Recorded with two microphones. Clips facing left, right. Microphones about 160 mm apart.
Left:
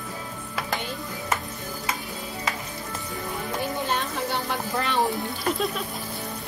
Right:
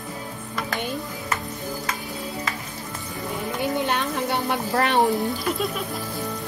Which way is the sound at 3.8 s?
65° right (ahead or behind).